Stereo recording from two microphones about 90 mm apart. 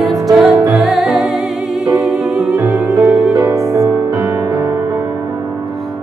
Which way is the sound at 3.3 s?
40° right (ahead or behind).